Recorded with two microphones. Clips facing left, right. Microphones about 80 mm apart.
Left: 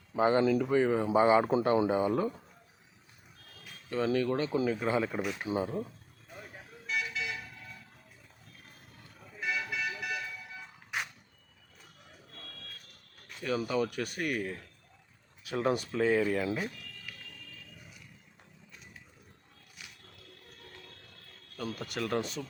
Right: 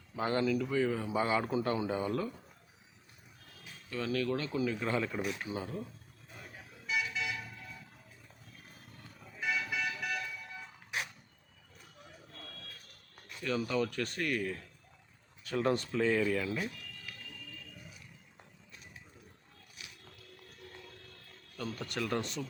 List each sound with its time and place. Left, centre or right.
0.1 s speech: left
0.5 s speech: left
3.8 s speech: left
6.5 s vehicle: centre
9.0 s vehicle: centre
13.4 s speech: centre
16.7 s fire alarm: centre
21.6 s speech: centre